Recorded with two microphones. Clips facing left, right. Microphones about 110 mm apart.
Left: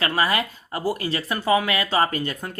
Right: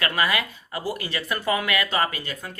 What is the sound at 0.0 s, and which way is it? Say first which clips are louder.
Speech: left 2 dB; 30° left (ahead or behind).